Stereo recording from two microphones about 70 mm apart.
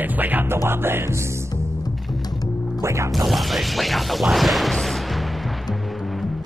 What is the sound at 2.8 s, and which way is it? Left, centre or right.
Speech, right.